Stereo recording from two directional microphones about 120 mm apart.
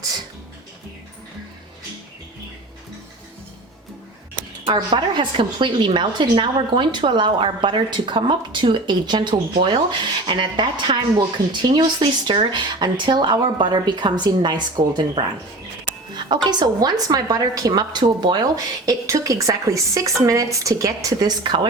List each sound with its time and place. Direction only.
4.7 s a woman's voice: 40° right (ahead or behind)
11.9 s a woman's voice: 45° right (ahead or behind)